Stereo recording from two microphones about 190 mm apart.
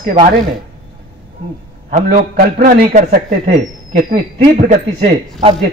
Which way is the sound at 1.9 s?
40° right (ahead or behind).